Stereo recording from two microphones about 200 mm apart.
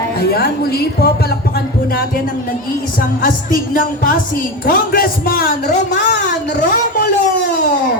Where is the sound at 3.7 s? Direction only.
45° left (ahead or behind).